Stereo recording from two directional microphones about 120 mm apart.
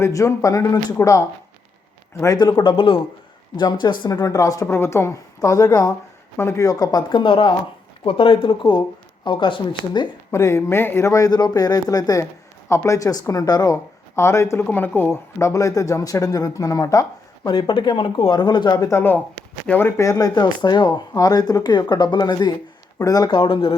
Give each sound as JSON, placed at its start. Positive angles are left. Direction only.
{"t": 0.0, "sound": "speech", "side_deg": 30}
{"t": 4.6, "sound": "speech", "side_deg": 20}
{"t": 7.1, "sound": "speech", "side_deg": 45}
{"t": 10.3, "sound": "speech", "side_deg": 25}
{"t": 20.0, "sound": "speech", "side_deg": 30}
{"t": 23.3, "sound": "speech", "side_deg": 45}